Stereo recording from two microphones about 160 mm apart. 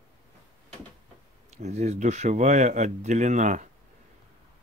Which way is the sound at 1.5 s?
45° right (ahead or behind).